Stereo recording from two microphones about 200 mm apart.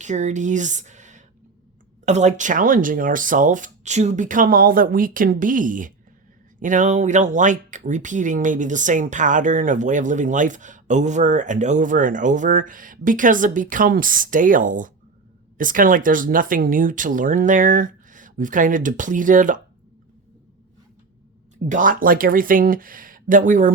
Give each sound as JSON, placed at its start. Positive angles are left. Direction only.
{"t": 0.0, "sound": "speech", "side_deg": -35}
{"t": 21.7, "sound": "speech", "side_deg": -40}